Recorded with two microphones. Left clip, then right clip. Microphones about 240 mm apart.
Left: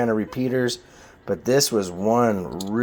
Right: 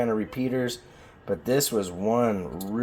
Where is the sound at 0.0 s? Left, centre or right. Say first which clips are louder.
Left 4 dB; left.